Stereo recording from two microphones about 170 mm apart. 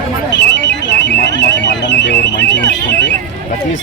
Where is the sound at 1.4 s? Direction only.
90° left.